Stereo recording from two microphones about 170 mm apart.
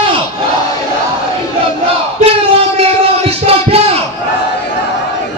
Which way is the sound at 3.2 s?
35° right (ahead or behind).